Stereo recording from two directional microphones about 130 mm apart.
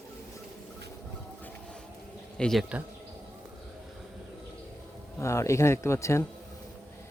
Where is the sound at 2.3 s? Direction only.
5° left (ahead or behind).